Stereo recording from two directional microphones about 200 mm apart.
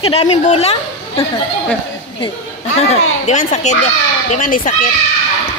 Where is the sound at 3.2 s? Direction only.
35° left (ahead or behind).